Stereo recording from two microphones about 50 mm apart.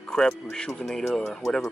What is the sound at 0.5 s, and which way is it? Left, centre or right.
Speech, centre.